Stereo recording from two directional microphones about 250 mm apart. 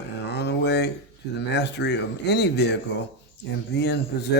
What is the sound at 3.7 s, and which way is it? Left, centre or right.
Speech, left.